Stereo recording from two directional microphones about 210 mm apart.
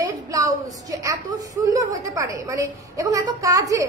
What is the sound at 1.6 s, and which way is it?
A woman's voice, 15° right (ahead or behind).